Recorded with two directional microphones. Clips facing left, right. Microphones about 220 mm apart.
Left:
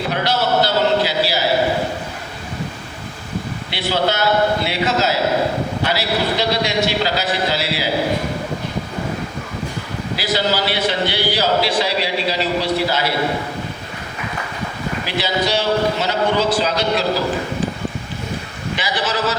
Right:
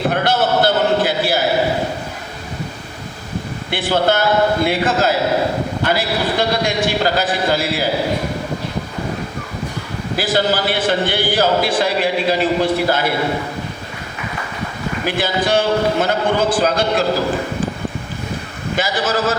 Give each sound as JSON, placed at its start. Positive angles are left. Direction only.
{"t": 0.1, "sound": "a man's voice", "side_deg": -50}
{"t": 3.7, "sound": "a man's voice", "side_deg": -50}
{"t": 10.2, "sound": "a man's voice", "side_deg": -50}
{"t": 15.0, "sound": "a man's voice", "side_deg": -50}
{"t": 18.8, "sound": "a man's voice", "side_deg": -45}